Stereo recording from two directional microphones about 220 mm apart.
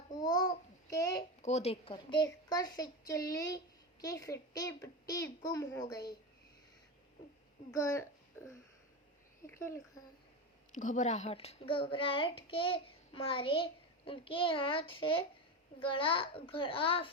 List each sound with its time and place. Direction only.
0.2 s babbling: 20° left (ahead or behind)
1.4 s a woman's voice: 30° left (ahead or behind)
7.7 s a woman's voice: 15° left (ahead or behind)
9.5 s a woman's voice: 10° left (ahead or behind)
10.8 s a child's voice: 35° left (ahead or behind)